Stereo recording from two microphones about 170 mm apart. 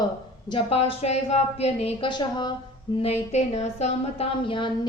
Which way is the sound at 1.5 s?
35° left (ahead or behind).